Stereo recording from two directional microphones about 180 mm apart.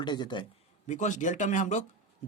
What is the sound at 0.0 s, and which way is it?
Speech, 25° left (ahead or behind).